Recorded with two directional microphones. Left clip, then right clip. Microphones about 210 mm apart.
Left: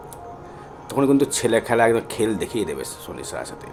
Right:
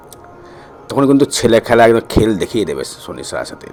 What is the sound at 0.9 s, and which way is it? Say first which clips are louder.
Speech: right 7 dB; 25° right (ahead or behind).